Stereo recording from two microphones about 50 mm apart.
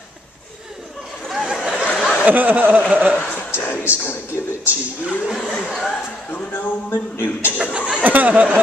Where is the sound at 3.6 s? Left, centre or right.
Left.